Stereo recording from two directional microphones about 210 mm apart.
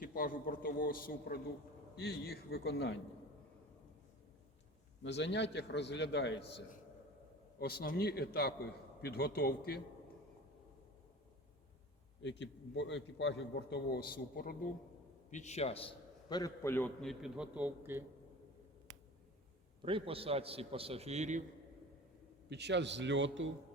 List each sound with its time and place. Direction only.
0.0 s a man's voice: 40° left (ahead or behind)
5.0 s a man's voice: 55° left (ahead or behind)
7.6 s a man's voice: 50° left (ahead or behind)
12.2 s a man's voice: 60° left (ahead or behind)
15.3 s a man's voice: 35° left (ahead or behind); by 18.0 s 10° right (ahead or behind)
19.8 s a man's voice: 25° right (ahead or behind)
22.4 s a man's voice: 55° right (ahead or behind)